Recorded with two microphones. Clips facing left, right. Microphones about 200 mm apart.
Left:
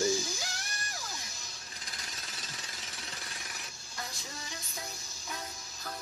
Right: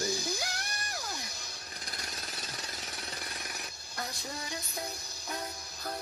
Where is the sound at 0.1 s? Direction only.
60° right (ahead or behind).